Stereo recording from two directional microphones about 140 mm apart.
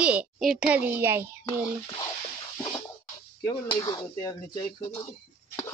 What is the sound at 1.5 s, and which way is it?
Speech, 25° left (ahead or behind).